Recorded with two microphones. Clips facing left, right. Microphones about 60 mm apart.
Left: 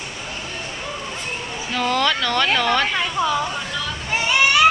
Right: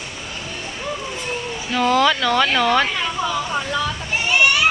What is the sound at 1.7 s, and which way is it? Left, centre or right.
Speech, centre.